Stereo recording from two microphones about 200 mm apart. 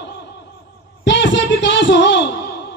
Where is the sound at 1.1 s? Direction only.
60° left (ahead or behind).